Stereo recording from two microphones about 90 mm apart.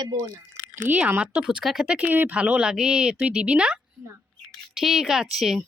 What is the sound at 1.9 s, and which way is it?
Speech, 20° right (ahead or behind).